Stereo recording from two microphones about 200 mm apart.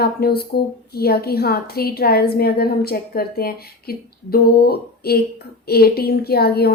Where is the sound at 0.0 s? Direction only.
50° left (ahead or behind).